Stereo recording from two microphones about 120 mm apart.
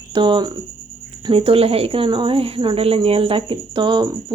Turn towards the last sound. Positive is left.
turn(degrees=-45)  # may be behind; listen again after turning